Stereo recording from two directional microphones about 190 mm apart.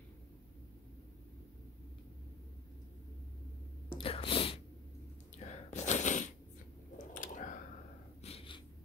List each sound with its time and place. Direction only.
3.9 s sneeze: 30° left (ahead or behind)
5.5 s a sound: 35° left (ahead or behind)
8.2 s snort: 30° left (ahead or behind)